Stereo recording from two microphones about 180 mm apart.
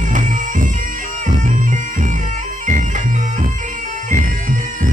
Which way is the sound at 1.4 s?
45° right (ahead or behind).